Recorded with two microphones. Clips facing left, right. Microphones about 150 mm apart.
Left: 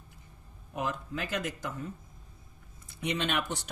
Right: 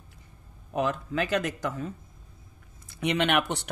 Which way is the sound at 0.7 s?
85° right.